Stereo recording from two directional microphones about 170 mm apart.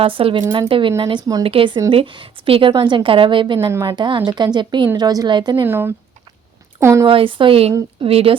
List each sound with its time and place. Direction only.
0.0 s a woman's voice: 35° right (ahead or behind)
5.6 s speech: 10° right (ahead or behind)
7.1 s speech: 30° right (ahead or behind)